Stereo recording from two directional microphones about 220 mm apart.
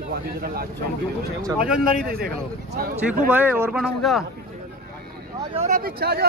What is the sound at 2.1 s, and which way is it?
Speech, 45° right (ahead or behind).